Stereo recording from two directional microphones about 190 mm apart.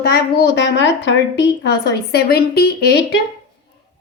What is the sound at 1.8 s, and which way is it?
A woman's voice, 60° left (ahead or behind).